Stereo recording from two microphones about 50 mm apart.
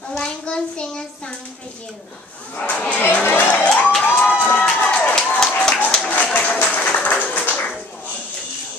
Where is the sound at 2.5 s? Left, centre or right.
Left.